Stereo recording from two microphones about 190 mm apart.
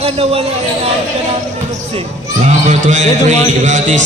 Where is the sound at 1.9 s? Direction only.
35° right (ahead or behind).